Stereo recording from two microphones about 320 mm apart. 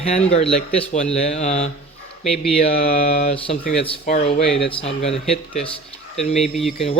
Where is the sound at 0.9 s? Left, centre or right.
Left.